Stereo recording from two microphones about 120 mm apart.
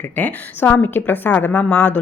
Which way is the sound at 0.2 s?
15° left (ahead or behind).